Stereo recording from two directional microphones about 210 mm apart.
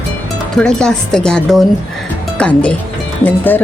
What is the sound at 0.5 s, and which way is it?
A woman's voice, 5° left (ahead or behind).